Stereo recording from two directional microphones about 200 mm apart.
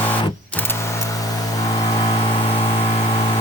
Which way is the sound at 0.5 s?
10° left (ahead or behind).